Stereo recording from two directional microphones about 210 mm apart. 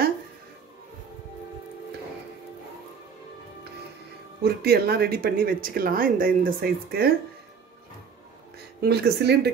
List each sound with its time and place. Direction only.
4.4 s speech: 45° right (ahead or behind)
8.8 s speech: 50° right (ahead or behind)